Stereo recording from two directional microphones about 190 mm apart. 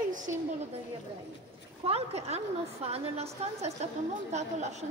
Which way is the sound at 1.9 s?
30° right (ahead or behind).